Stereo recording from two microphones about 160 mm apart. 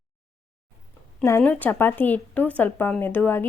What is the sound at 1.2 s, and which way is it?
A woman's voice, 15° left (ahead or behind).